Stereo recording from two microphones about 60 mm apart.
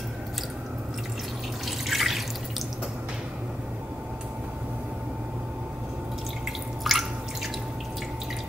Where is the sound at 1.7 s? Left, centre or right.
Centre.